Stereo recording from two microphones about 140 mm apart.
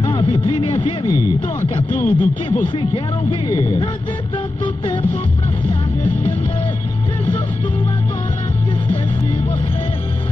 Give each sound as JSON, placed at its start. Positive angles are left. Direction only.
{"t": 0.0, "sound": "speech", "side_deg": 35}
{"t": 2.0, "sound": "speech", "side_deg": 10}
{"t": 2.9, "sound": "speech", "side_deg": 40}
{"t": 3.5, "sound": "speech", "side_deg": 25}